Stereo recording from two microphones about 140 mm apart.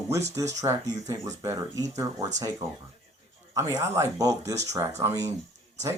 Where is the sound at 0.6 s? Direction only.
20° right (ahead or behind).